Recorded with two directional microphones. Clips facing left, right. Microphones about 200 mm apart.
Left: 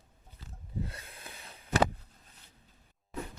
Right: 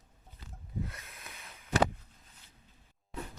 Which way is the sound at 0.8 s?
30° left (ahead or behind).